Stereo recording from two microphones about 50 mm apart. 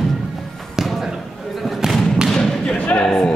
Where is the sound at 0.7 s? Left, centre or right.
Centre.